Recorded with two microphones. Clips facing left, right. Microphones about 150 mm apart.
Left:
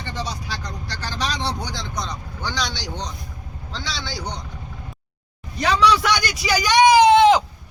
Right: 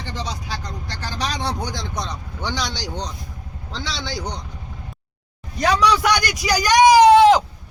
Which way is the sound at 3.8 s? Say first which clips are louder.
Right 2 dB; 15° right (ahead or behind).